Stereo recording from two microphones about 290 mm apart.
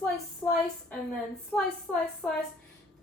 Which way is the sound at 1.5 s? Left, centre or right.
Centre.